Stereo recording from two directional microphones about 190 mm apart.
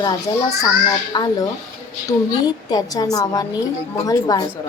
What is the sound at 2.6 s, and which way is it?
A woman's voice, 20° left (ahead or behind).